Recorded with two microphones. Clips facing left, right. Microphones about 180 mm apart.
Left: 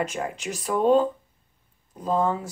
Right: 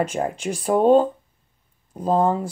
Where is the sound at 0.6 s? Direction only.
45° right (ahead or behind).